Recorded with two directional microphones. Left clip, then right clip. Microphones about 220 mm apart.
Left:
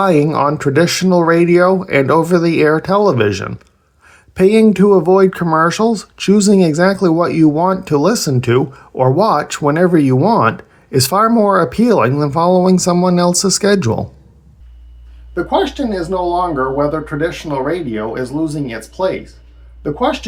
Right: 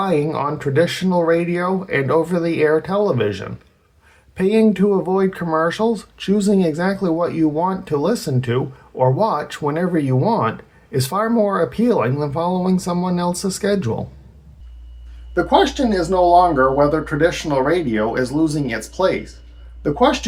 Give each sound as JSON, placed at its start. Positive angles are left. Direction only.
{"t": 0.0, "sound": "speech", "side_deg": 30}
{"t": 15.4, "sound": "speech", "side_deg": 10}